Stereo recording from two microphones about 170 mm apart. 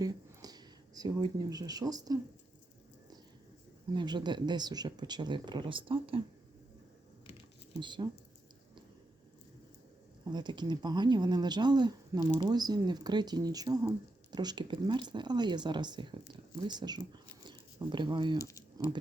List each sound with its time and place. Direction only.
0.0 s speech: 20° right (ahead or behind)
3.9 s speech: 25° right (ahead or behind)
7.8 s speech: 25° right (ahead or behind)
10.2 s speech: 25° right (ahead or behind)
18.3 s speech: 20° left (ahead or behind)